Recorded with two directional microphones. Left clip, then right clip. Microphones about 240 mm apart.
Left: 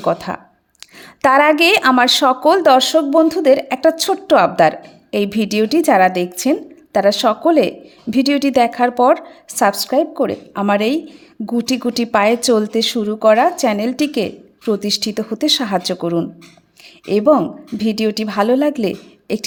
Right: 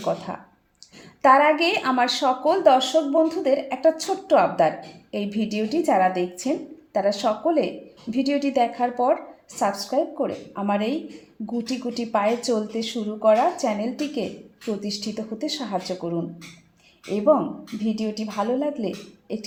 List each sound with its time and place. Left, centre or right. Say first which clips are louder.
0.0 s speech: left 8 dB; left